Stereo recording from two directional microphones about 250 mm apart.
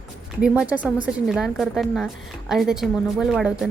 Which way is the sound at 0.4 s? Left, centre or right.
Centre.